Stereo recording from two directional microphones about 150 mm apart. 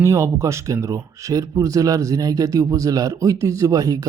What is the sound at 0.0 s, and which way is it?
Speech, 20° right (ahead or behind).